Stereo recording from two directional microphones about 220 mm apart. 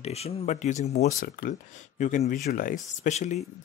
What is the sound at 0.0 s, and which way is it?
Speech, 30° left (ahead or behind).